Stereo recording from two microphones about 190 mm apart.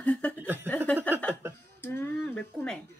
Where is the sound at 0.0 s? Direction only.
5° left (ahead or behind).